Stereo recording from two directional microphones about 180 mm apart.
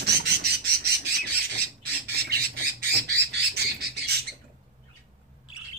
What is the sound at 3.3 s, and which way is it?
Bird, 65° right (ahead or behind).